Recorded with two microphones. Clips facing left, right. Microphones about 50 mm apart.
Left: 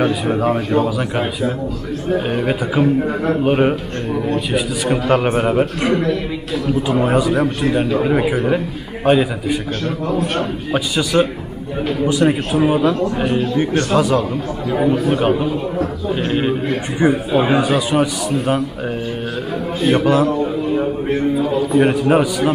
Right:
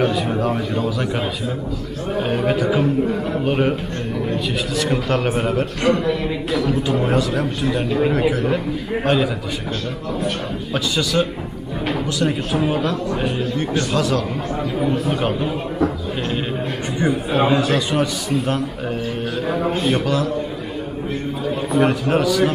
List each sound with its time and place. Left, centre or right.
0.0 s a man's voice: centre
2.2 s a man's voice: centre
6.5 s a man's voice: centre
10.7 s a man's voice: centre
19.8 s a man's voice: centre
21.7 s a man's voice: centre